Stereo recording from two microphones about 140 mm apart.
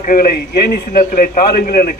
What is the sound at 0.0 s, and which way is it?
A man's voice, 90° left.